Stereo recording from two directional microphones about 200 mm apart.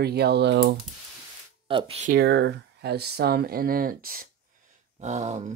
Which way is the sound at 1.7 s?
30° right (ahead or behind).